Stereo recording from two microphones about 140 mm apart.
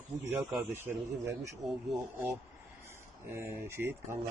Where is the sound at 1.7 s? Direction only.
Centre (ahead or behind).